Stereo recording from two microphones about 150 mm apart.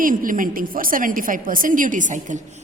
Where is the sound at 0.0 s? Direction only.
65° right (ahead or behind).